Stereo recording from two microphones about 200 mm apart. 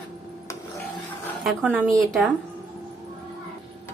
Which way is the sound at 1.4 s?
5° right (ahead or behind).